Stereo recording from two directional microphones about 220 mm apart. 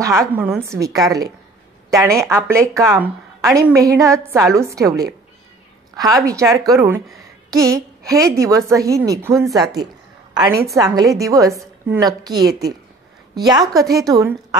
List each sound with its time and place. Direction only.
0.0 s a woman's voice: 15° right (ahead or behind)